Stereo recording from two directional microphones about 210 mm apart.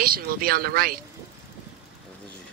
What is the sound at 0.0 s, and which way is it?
Speech, 45° right (ahead or behind).